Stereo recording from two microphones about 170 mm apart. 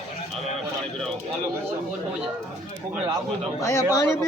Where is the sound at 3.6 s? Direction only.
20° left (ahead or behind).